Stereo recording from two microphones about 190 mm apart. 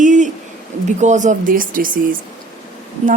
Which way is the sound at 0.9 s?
40° right (ahead or behind).